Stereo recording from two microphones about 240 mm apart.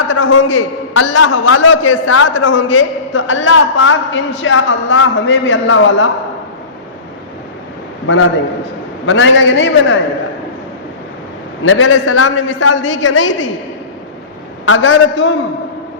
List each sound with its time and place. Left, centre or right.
0.1 s a man's voice: left
8.0 s a man's voice: left
11.6 s a man's voice: left
14.6 s a man's voice: left